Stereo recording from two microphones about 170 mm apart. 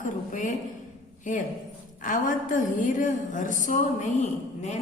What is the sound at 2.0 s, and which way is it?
A woman's voice, 50° left (ahead or behind).